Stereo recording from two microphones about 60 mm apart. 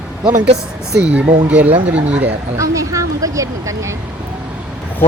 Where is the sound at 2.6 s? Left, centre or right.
Right.